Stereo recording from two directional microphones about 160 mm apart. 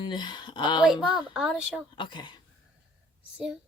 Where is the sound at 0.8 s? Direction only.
5° right (ahead or behind).